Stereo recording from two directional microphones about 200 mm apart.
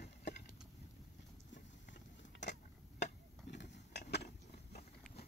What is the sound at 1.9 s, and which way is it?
Vehicle, 60° left (ahead or behind).